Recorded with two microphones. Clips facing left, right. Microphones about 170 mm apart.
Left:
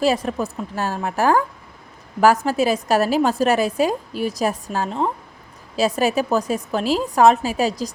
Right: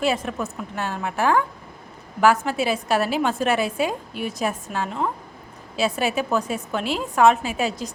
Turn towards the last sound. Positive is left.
turn(degrees=35)  # may be behind; listen again after turning